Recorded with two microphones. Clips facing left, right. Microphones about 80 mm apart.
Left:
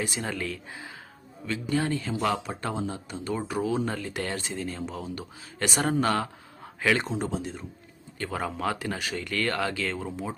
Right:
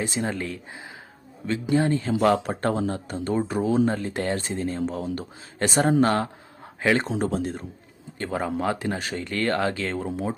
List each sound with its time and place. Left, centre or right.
0.0 s speech: right
2.2 s speech: right
3.3 s speech: right
7.2 s speech: right
8.2 s speech: right